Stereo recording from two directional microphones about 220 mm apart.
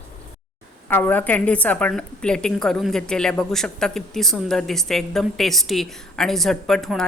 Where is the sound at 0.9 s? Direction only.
10° left (ahead or behind).